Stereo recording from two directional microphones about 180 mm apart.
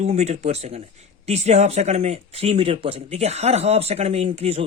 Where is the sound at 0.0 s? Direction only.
40° right (ahead or behind).